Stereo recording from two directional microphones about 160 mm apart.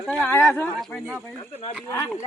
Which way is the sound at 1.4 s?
35° left (ahead or behind).